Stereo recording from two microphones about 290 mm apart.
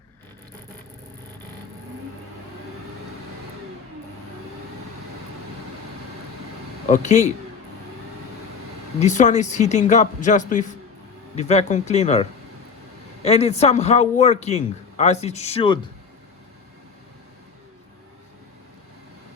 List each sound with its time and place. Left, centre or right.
6.8 s a man's voice: left
9.0 s a man's voice: left